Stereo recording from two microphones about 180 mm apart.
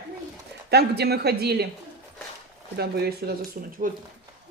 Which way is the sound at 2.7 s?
60° right (ahead or behind).